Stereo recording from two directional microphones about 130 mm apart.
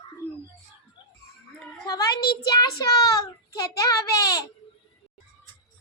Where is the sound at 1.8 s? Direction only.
30° left (ahead or behind).